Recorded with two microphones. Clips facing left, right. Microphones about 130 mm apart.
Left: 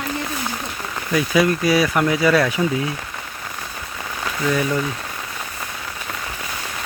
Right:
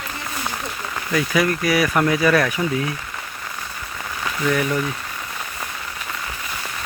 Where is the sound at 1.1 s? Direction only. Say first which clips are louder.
Left 2 dB; 20° left (ahead or behind).